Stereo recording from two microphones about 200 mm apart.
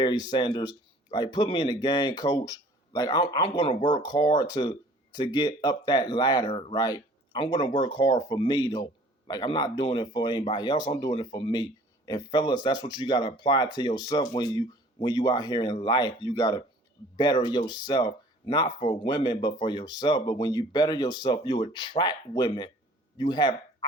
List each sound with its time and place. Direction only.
0.0 s speech: 20° left (ahead or behind)